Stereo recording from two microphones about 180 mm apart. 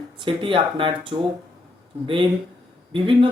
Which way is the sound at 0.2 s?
25° right (ahead or behind).